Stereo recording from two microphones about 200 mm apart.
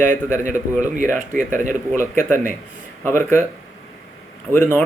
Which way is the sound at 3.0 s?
10° left (ahead or behind).